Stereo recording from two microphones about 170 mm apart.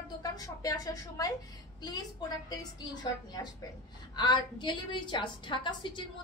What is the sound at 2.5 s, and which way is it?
A woman's voice, 25° left (ahead or behind).